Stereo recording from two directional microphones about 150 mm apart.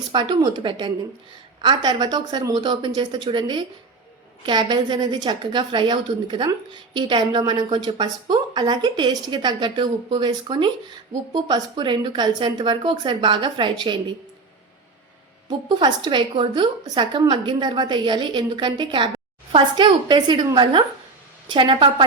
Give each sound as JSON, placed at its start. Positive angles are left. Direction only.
{"t": 0.1, "sound": "a woman's voice", "side_deg": -30}
{"t": 15.7, "sound": "a woman's voice", "side_deg": -30}